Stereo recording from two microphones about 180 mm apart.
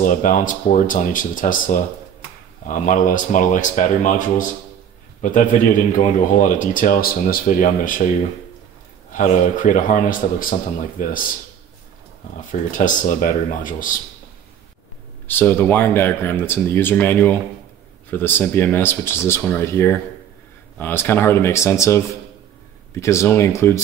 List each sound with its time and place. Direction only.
0.0 s a man's voice: 45° left (ahead or behind)
9.1 s a man's voice: 45° left (ahead or behind)
12.4 s a man's voice: 45° left (ahead or behind)
15.2 s speech: 10° left (ahead or behind)